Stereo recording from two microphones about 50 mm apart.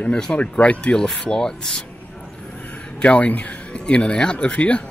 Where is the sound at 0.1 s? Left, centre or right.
Centre.